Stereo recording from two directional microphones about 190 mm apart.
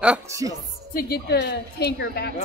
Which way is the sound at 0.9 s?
55° left (ahead or behind).